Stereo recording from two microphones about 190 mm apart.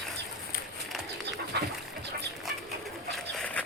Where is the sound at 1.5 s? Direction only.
60° right (ahead or behind).